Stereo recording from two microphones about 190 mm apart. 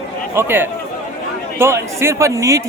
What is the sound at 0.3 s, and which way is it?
A man's voice, 10° right (ahead or behind).